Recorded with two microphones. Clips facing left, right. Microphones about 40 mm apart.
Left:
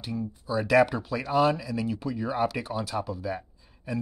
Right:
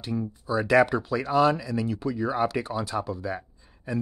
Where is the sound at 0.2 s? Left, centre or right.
Centre.